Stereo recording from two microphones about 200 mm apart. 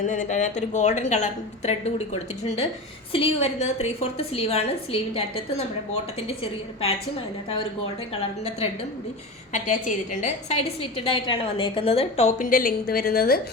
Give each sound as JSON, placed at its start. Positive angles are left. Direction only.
{"t": 0.1, "sound": "a woman's voice", "side_deg": 40}
{"t": 9.5, "sound": "a woman's voice", "side_deg": 40}